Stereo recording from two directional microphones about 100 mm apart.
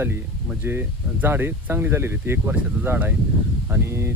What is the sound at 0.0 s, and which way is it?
Speech, 20° right (ahead or behind).